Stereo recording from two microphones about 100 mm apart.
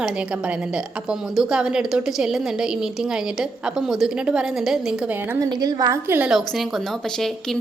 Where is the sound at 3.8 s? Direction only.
5° right (ahead or behind).